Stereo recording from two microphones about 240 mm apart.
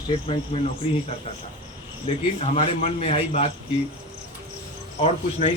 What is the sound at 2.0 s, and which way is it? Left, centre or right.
A man's voice, left.